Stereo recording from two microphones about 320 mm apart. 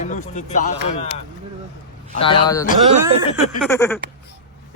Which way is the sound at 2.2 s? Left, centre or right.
Centre.